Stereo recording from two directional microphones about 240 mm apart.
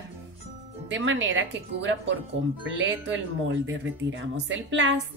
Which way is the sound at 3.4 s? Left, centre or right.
Right.